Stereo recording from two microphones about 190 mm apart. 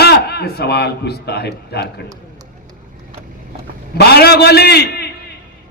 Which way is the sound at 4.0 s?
60° left (ahead or behind).